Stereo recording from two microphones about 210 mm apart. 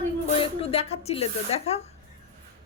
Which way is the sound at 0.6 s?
30° left (ahead or behind).